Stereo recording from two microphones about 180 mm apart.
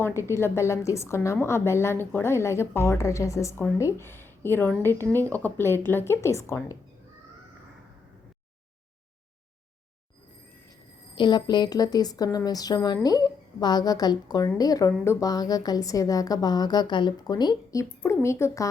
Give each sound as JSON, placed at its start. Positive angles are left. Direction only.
{"t": 0.0, "sound": "a woman's voice", "side_deg": 15}
{"t": 11.1, "sound": "speech", "side_deg": 25}